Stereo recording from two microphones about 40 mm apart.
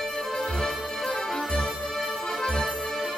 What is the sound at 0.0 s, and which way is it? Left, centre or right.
Music, centre.